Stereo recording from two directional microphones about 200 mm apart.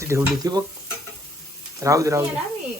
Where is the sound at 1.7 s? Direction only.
15° right (ahead or behind).